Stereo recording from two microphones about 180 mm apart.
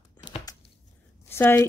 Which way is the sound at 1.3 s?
15° left (ahead or behind).